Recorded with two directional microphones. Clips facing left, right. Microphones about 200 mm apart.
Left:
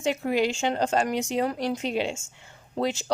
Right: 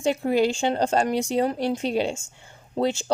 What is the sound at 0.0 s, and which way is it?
Speech, 30° right (ahead or behind).